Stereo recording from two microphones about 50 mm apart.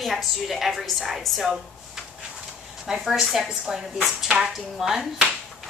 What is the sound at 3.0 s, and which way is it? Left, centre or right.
A woman's voice, centre.